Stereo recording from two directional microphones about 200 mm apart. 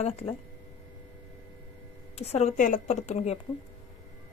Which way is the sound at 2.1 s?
30° left (ahead or behind).